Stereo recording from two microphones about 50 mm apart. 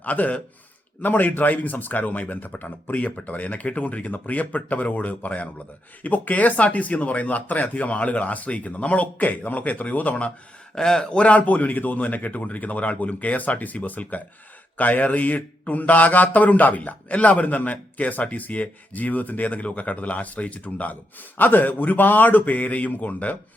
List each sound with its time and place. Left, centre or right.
0.0 s speech: left
10.8 s speech: centre; by 23.4 s left